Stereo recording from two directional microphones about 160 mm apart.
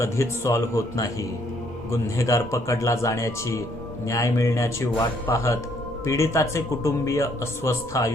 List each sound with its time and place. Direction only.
0.0 s a man's voice: 20° left (ahead or behind)